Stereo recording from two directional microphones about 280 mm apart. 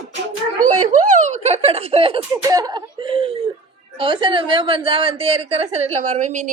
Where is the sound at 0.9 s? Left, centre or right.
Right.